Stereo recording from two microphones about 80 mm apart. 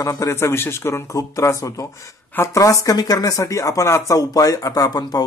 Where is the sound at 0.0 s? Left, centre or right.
Left.